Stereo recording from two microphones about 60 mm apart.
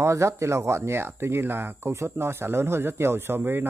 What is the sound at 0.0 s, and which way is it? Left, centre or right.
Speech, right.